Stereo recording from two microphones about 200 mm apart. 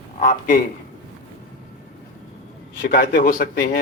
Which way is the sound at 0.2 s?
45° left (ahead or behind).